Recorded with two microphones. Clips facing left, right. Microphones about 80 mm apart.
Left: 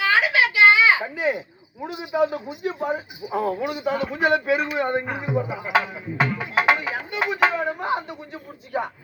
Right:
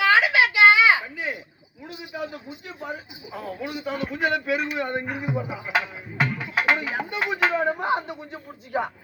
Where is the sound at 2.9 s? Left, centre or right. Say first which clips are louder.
Left 10 dB; left.